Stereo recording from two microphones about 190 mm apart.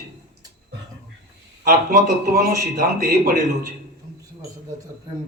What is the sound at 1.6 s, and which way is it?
Speech, 50° right (ahead or behind).